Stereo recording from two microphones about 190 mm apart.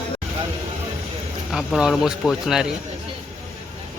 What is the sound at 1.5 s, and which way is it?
Speech, centre (ahead or behind).